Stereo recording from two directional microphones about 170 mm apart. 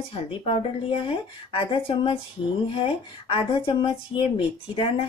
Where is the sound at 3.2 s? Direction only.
30° left (ahead or behind).